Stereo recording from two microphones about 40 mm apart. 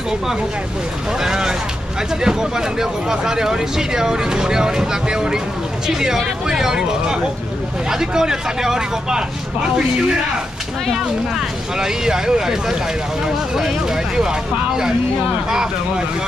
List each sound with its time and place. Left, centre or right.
1.2 s speech: centre
10.9 s speech: centre